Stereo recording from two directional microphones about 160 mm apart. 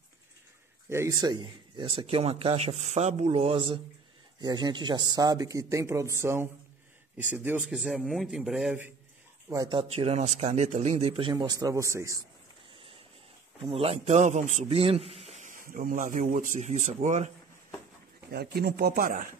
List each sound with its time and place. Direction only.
0.8 s speech: 15° right (ahead or behind)
7.7 s speech: centre (ahead or behind)
9.5 s speech: 25° right (ahead or behind)
13.7 s a man's voice: 40° right (ahead or behind)
18.3 s speech: 80° right; by 19.2 s 60° right (ahead or behind)